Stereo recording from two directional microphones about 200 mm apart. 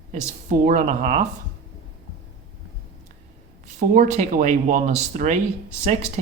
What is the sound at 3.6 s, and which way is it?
Speech, 35° right (ahead or behind).